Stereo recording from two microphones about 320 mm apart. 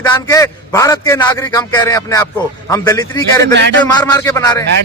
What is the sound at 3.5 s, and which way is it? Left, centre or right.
Speech, right.